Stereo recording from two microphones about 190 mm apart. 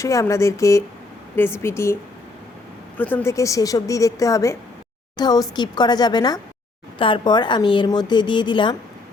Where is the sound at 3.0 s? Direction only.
10° left (ahead or behind).